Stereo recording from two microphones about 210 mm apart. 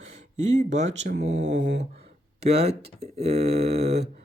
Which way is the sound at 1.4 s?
60° right (ahead or behind).